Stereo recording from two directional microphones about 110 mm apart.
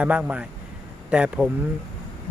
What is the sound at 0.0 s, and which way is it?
Speech, 10° right (ahead or behind).